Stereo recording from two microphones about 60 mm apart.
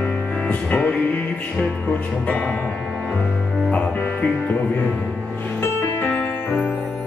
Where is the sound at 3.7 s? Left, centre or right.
Left.